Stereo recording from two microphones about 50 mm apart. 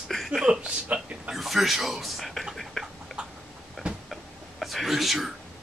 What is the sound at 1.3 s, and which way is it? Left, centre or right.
Speech, centre.